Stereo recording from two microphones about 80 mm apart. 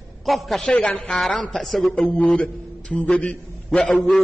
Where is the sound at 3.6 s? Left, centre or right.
Centre.